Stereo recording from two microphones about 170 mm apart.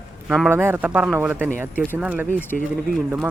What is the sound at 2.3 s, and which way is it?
Speech, 10° left (ahead or behind).